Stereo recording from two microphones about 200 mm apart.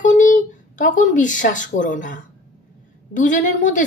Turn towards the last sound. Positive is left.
turn(degrees=40)  # may be behind; listen again after turning